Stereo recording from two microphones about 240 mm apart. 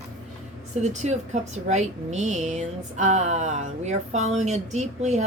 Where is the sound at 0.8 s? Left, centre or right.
Right.